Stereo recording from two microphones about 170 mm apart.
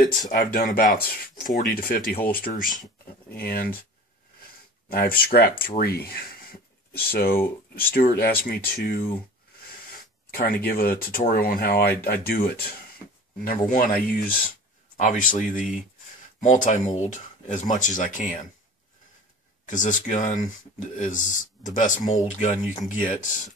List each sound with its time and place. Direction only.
0.3 s speech: 55° left (ahead or behind)
4.8 s speech: 60° left (ahead or behind)
10.3 s speech: 60° left (ahead or behind)
19.6 s speech: 50° left (ahead or behind)